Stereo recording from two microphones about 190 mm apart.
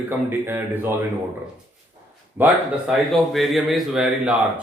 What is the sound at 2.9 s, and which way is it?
A man's voice, centre (ahead or behind).